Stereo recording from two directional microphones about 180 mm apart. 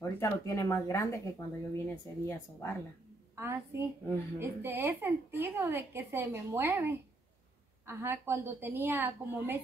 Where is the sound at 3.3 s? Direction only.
15° right (ahead or behind).